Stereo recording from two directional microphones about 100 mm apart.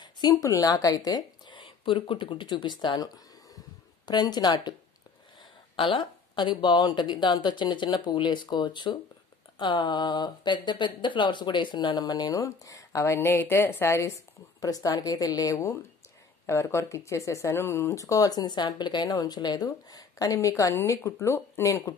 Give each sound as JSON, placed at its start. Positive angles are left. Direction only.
{"t": 0.0, "sound": "speech", "side_deg": 40}
{"t": 3.5, "sound": "a sound", "side_deg": 45}
{"t": 5.8, "sound": "speech", "side_deg": 55}